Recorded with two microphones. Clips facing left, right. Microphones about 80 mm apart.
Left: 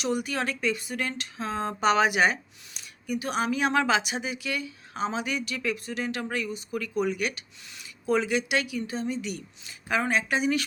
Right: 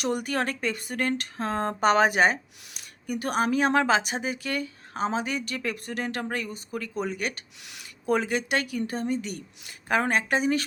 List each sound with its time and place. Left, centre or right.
0.0 s a woman's voice: right
3.1 s a woman's voice: right
7.6 s speech: right
8.0 s a woman's voice: right